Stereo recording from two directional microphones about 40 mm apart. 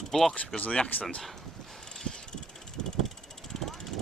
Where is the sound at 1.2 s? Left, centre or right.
Centre.